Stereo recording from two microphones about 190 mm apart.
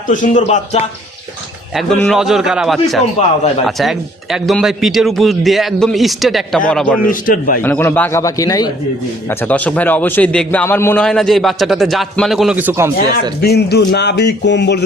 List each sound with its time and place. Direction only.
0.1 s speech: 40° left (ahead or behind)
2.0 s a man's voice: centre (ahead or behind)
7.1 s a man's voice: 45° left (ahead or behind)
7.6 s a man's voice: 10° left (ahead or behind); by 13.3 s 15° right (ahead or behind)
13.4 s speech: 60° left (ahead or behind)